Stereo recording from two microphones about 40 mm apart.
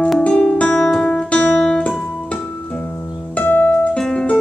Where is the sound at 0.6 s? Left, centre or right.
Left.